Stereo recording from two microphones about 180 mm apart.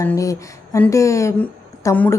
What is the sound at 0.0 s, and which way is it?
Speech, 15° left (ahead or behind).